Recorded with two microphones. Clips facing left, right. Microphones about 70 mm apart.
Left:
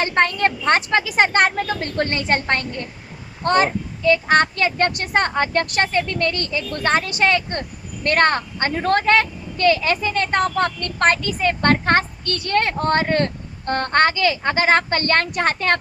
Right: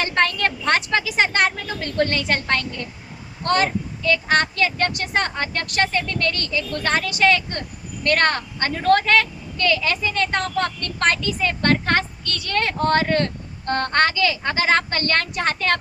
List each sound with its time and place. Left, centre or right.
0.0 s a woman's voice: left